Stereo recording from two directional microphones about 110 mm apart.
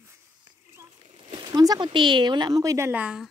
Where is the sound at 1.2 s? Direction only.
45° right (ahead or behind); by 2.9 s 30° right (ahead or behind).